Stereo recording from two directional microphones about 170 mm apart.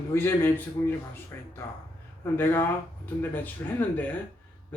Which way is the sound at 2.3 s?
10° left (ahead or behind).